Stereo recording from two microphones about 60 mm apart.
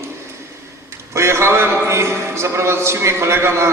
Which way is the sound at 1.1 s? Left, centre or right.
Right.